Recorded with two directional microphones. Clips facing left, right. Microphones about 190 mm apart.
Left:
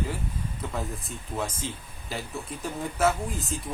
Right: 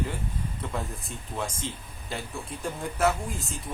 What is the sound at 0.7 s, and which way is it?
Speech, centre (ahead or behind).